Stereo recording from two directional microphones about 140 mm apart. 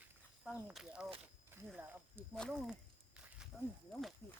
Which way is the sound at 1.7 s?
15° right (ahead or behind).